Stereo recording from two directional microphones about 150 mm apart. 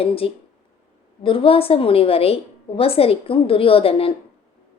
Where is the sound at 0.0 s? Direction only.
40° left (ahead or behind).